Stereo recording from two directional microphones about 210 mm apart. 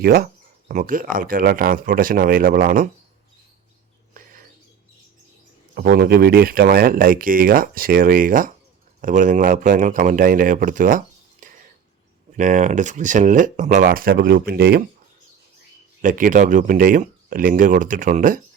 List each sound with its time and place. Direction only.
0.0 s speech: 45° right (ahead or behind)
4.1 s mouse: 40° right (ahead or behind)
5.7 s speech: 50° right (ahead or behind)
16.0 s speech: 40° right (ahead or behind)